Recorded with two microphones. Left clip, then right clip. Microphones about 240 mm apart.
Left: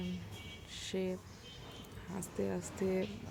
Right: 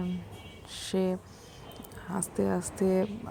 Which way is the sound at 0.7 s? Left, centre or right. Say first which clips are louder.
Right 8 dB; centre.